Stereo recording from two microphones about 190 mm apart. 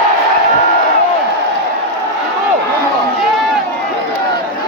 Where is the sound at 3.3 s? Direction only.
Centre (ahead or behind).